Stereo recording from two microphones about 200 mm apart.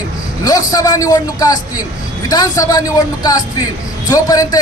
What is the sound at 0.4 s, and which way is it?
A man's voice, 20° left (ahead or behind).